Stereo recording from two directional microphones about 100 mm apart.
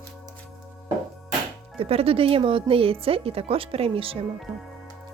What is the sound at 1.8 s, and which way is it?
Speech, 70° right (ahead or behind).